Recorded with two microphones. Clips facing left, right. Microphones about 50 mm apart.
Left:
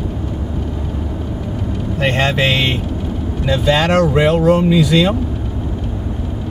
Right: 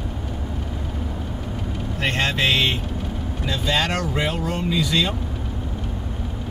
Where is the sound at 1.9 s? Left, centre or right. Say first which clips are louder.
Left 6 dB; centre.